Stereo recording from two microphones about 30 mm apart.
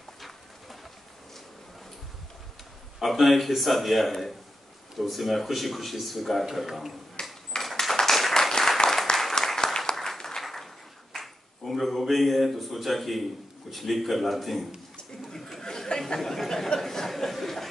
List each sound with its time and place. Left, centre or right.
3.0 s speech: centre
6.6 s speech: centre
7.2 s a sound: left
7.5 s ping: left
8.1 s applause: centre
9.6 s applause: left
9.9 s applause: centre
11.1 s speech: centre
15.2 s a sound: centre
16.2 s speech: centre
16.4 s a sound: centre
17.2 s chuckle: centre